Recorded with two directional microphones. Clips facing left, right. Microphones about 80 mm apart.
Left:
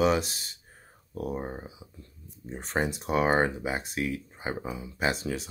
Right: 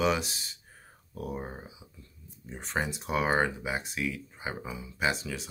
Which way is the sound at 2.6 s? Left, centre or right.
Left.